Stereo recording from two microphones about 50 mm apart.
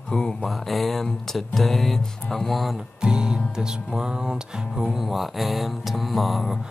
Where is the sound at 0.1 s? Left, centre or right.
Centre.